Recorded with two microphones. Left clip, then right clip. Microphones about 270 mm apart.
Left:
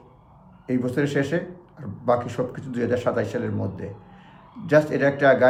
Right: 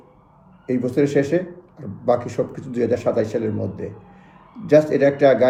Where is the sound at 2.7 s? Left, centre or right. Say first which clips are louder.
Right 4 dB; centre.